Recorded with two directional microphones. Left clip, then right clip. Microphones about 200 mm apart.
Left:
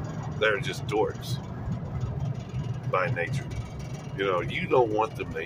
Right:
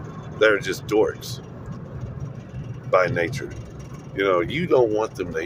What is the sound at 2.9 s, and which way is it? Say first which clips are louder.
Speech: right 8 dB; 30° right (ahead or behind).